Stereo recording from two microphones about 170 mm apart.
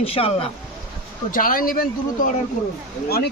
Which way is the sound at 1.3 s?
55° left (ahead or behind).